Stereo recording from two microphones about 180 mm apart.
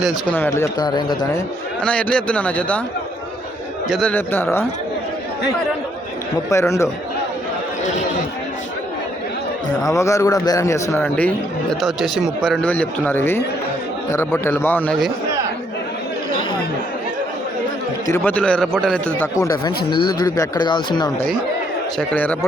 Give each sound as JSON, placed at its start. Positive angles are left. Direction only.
{"t": 0.0, "sound": "speech", "side_deg": 0}
{"t": 0.3, "sound": "speech", "side_deg": 15}
{"t": 1.8, "sound": "a man's voice", "side_deg": 5}
{"t": 3.8, "sound": "a man's voice", "side_deg": 5}
{"t": 6.5, "sound": "a man's voice", "side_deg": 15}
{"t": 9.9, "sound": "a man's voice", "side_deg": 15}
{"t": 18.1, "sound": "a man's voice", "side_deg": 10}
{"t": 19.4, "sound": "speech", "side_deg": 20}
{"t": 21.9, "sound": "a man's voice", "side_deg": 10}